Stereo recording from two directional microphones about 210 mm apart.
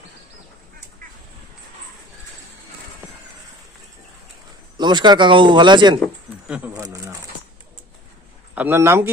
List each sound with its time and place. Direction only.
4.8 s speech: 20° right (ahead or behind)
6.5 s speech: 5° right (ahead or behind)
6.8 s speech: 15° right (ahead or behind)
8.5 s speech: 10° right (ahead or behind)